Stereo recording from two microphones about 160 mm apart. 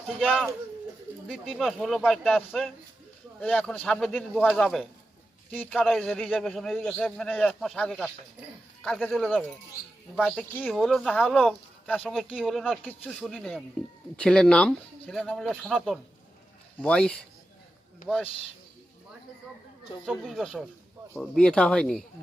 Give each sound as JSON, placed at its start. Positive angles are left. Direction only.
{"t": 0.3, "sound": "a man's voice", "side_deg": 0}
{"t": 20.2, "sound": "a man's voice", "side_deg": 0}